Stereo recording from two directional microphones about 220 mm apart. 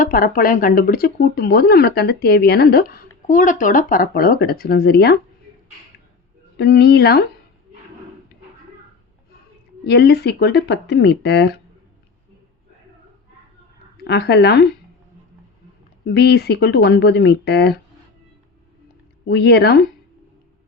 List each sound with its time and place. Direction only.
0.0 s speech: 40° left (ahead or behind)
6.6 s speech: 45° left (ahead or behind)
9.8 s speech: 45° left (ahead or behind)
13.9 s speech: 50° left (ahead or behind)
16.0 s speech: 50° left (ahead or behind)
19.3 s speech: 50° left (ahead or behind)